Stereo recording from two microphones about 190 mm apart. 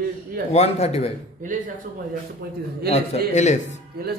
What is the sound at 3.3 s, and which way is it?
Speech, 40° left (ahead or behind).